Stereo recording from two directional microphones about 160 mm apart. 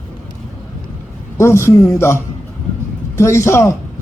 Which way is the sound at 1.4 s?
15° left (ahead or behind).